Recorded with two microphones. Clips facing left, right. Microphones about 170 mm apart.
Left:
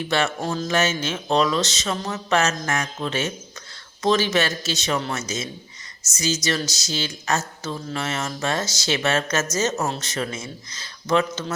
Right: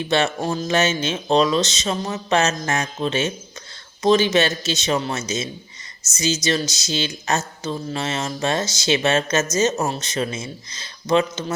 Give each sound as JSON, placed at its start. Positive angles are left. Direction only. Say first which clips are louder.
{"t": 0.1, "sound": "speech", "louder": "right 3 dB", "side_deg": -20}